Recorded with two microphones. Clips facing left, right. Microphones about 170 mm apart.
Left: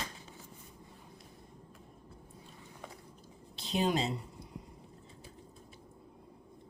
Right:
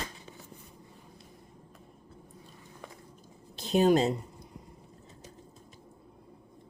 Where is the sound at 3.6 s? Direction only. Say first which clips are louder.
Right 8 dB; 45° right (ahead or behind).